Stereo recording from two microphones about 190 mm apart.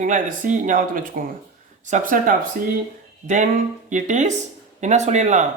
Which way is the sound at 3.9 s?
40° right (ahead or behind).